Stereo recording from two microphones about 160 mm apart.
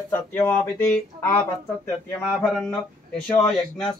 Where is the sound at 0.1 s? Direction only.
15° left (ahead or behind).